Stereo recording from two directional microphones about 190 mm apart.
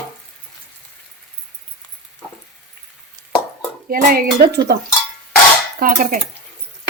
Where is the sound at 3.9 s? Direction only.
50° right (ahead or behind).